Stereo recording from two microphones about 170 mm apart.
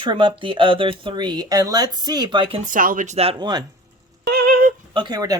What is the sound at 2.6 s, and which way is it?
Speech, 55° right (ahead or behind).